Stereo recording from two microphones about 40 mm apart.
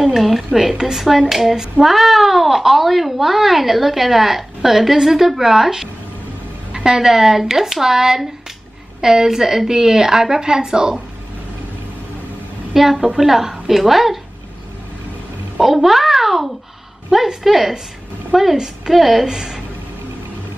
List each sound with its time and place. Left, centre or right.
0.0 s a sound: centre
0.6 s a child's voice: centre
12.7 s a woman's voice: centre
15.5 s a woman's voice: centre
19.2 s a woman's voice: centre